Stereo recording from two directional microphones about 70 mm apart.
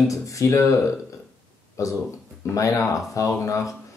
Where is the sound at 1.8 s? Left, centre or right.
Left.